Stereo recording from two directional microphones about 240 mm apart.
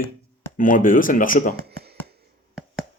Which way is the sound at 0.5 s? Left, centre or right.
Left.